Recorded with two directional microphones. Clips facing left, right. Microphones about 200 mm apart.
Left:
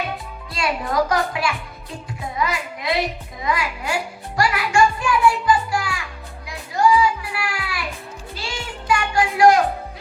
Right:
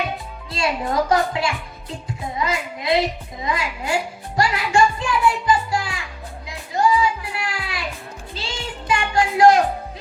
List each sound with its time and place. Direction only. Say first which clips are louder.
0.5 s a woman's voice: even; 25° right (ahead or behind)
4.4 s music: even; 25° right (ahead or behind)
8.4 s child singing: right 1 dB; 20° right (ahead or behind)